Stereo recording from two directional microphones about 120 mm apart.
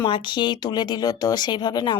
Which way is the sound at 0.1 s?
40° left (ahead or behind).